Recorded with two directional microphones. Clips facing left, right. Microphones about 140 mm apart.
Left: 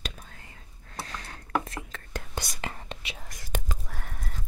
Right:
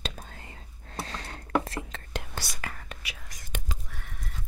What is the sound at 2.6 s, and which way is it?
Whispering, 25° left (ahead or behind).